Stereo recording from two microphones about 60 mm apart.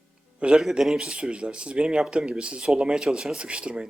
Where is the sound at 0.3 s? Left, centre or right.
Centre.